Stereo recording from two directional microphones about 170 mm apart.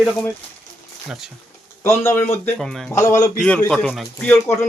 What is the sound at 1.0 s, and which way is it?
Speech, centre (ahead or behind).